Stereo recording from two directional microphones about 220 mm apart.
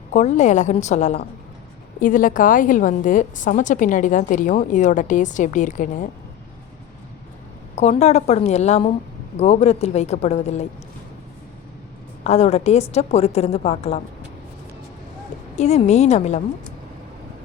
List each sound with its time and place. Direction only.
0.1 s a woman's voice: 30° left (ahead or behind)
7.8 s speech: 30° left (ahead or behind)
12.2 s speech: 30° left (ahead or behind)
15.5 s a woman's voice: 30° left (ahead or behind)